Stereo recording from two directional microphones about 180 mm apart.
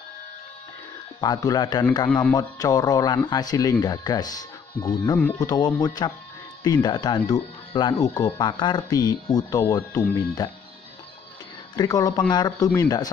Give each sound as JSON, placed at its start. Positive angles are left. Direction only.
{"t": 1.2, "sound": "speech", "side_deg": 20}
{"t": 11.7, "sound": "speech", "side_deg": 20}